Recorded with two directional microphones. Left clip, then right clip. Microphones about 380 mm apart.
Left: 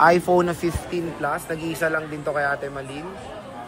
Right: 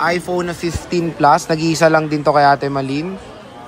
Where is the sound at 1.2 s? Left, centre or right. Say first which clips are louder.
Right 17 dB; right.